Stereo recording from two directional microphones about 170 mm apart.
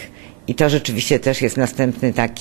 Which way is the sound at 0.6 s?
10° right (ahead or behind).